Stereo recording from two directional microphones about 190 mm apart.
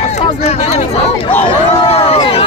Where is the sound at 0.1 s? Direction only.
35° left (ahead or behind).